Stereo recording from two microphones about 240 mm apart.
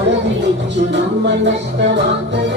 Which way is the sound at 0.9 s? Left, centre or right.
Right.